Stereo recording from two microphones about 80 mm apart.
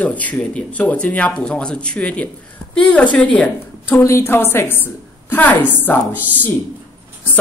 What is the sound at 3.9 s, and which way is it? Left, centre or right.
Speech, left.